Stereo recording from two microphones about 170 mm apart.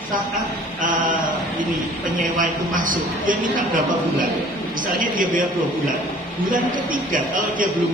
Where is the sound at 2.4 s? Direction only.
50° right (ahead or behind).